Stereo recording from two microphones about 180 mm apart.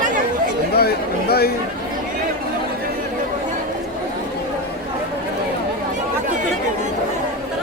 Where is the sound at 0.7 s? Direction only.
60° left (ahead or behind).